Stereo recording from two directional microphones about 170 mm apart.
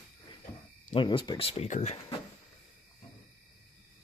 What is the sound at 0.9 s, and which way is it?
Speech, 30° left (ahead or behind).